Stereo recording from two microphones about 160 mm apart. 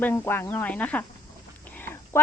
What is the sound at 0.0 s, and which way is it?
Speech, 15° left (ahead or behind).